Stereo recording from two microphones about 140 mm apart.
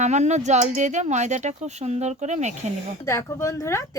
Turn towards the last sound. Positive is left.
turn(degrees=20)  # may be behind; listen again after turning